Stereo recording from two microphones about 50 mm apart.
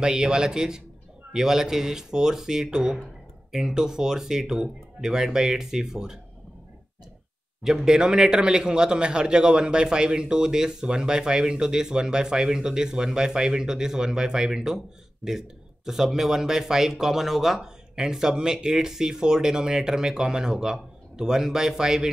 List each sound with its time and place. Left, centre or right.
0.0 s speech: centre
7.6 s speech: centre